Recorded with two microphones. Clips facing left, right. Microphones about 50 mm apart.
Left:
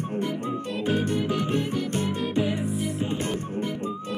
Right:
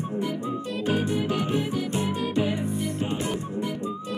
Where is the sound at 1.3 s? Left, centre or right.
Centre.